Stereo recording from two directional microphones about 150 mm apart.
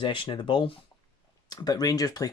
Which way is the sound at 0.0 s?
35° left (ahead or behind).